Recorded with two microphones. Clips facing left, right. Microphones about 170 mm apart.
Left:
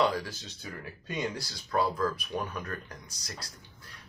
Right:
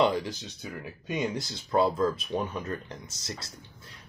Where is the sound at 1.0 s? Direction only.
20° right (ahead or behind).